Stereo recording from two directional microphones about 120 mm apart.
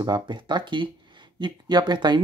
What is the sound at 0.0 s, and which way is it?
Speech, 40° right (ahead or behind).